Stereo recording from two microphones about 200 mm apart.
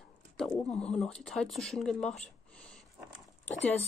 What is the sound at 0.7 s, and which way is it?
Speech, 30° left (ahead or behind).